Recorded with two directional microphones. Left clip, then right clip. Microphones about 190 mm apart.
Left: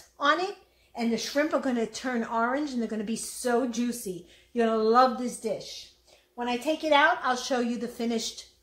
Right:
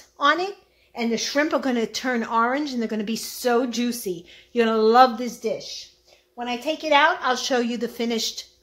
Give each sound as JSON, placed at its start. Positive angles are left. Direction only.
{"t": 0.2, "sound": "speech", "side_deg": -45}